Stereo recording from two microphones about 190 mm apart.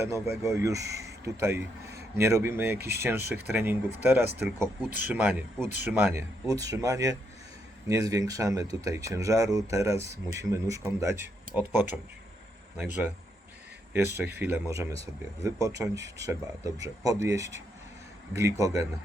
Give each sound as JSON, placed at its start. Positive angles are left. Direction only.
{"t": 0.0, "sound": "speech", "side_deg": -15}
{"t": 14.3, "sound": "speech", "side_deg": -10}